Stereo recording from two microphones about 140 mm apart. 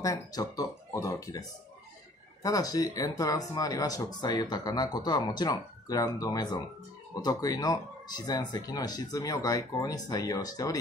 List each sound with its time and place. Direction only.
0.0 s speech: 25° left (ahead or behind)
2.4 s speech: 25° left (ahead or behind)